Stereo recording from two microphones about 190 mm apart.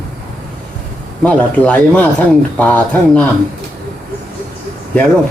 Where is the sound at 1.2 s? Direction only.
5° left (ahead or behind).